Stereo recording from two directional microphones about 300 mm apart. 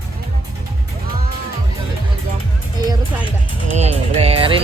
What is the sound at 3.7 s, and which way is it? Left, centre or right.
Speech, right.